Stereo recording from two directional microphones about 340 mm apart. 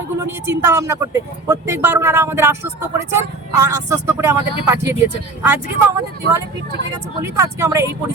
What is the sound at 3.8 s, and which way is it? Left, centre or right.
Speech, right.